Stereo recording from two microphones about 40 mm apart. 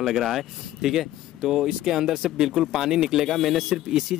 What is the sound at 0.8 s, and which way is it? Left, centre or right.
Speech, centre.